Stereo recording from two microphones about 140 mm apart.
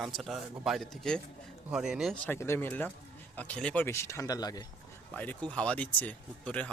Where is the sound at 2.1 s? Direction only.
15° left (ahead or behind); by 4.7 s 30° left (ahead or behind).